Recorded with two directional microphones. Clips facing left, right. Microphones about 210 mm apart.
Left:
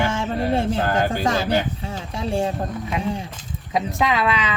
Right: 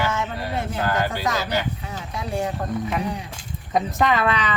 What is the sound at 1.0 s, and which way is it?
Speech, 50° left (ahead or behind).